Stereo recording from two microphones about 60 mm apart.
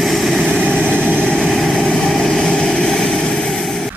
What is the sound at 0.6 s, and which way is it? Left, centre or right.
Vehicle, centre.